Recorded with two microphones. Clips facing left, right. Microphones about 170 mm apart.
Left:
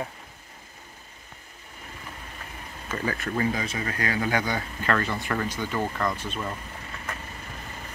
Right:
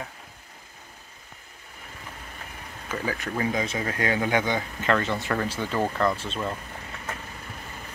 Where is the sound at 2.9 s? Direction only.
10° right (ahead or behind).